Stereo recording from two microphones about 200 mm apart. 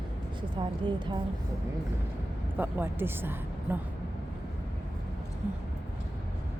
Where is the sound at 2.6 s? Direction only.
10° right (ahead or behind).